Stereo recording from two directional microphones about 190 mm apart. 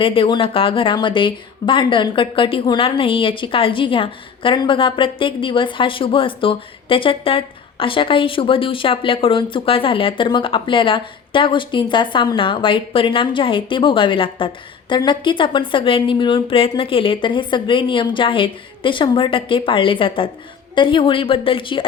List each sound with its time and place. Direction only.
0.0 s speech: 30° left (ahead or behind)